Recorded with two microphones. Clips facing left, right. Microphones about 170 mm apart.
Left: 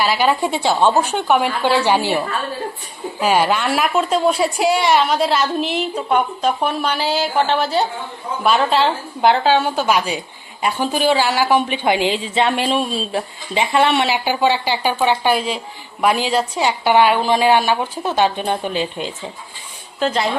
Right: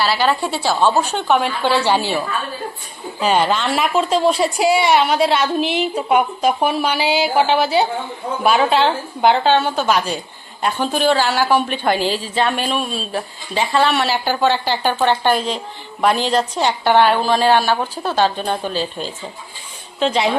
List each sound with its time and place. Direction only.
0.0 s a woman's voice: 10° left (ahead or behind)
20.0 s a woman's voice: centre (ahead or behind)